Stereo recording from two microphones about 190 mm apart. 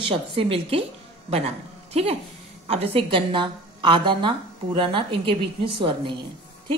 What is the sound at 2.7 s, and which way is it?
A woman's voice, 30° right (ahead or behind).